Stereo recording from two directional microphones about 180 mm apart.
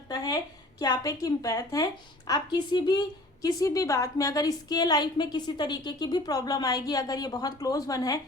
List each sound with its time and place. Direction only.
0.1 s a woman's voice: 20° left (ahead or behind)